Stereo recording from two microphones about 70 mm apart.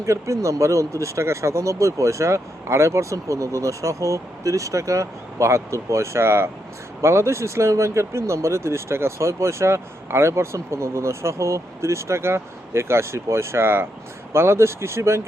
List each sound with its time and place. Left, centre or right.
0.0 s speech: right